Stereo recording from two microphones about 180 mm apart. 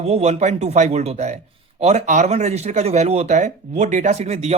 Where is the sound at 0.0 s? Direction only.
35° right (ahead or behind).